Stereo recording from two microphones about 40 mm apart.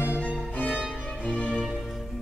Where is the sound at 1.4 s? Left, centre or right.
Left.